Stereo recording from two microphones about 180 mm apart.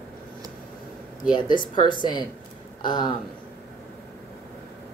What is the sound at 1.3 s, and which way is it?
Speech, 25° left (ahead or behind).